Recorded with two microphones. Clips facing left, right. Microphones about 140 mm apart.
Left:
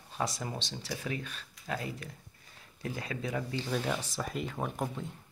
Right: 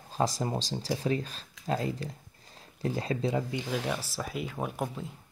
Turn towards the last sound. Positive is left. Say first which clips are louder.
# right 1 dB
turn(degrees=-5)  # may be behind; listen again after turning